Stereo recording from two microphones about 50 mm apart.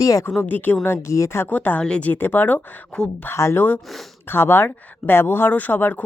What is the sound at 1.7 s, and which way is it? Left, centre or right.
Speech, centre.